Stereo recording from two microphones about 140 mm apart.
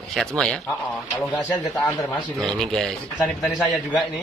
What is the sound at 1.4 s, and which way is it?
Speech, 25° left (ahead or behind).